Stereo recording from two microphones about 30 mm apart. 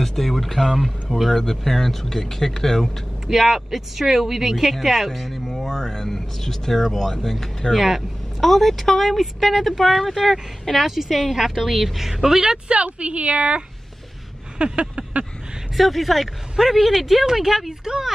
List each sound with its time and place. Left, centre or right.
0.0 s speech: centre
3.3 s speech: centre
5.7 s speech: centre
10.7 s speech: centre
11.3 s a woman's voice: centre
12.4 s speech: right
12.7 s a woman's voice: right
14.6 s a sound: right
15.7 s a woman's voice: centre